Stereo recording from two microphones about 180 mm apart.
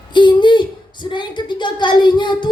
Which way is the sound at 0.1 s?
25° left (ahead or behind).